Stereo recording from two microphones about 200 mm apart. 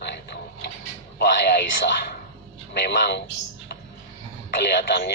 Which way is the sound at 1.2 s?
55° left (ahead or behind).